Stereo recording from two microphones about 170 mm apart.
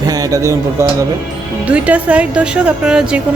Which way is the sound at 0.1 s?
20° right (ahead or behind).